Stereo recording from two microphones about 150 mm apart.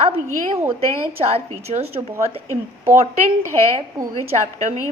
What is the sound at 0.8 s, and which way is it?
A woman's voice, 40° right (ahead or behind).